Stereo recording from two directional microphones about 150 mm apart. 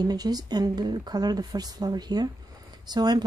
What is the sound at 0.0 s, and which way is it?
A woman's voice, 25° right (ahead or behind).